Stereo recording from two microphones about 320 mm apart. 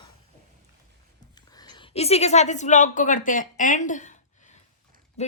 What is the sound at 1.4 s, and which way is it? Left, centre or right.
A woman's voice, centre.